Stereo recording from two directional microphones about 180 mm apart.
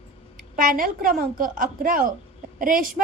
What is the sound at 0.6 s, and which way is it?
A woman's voice, 50° right (ahead or behind).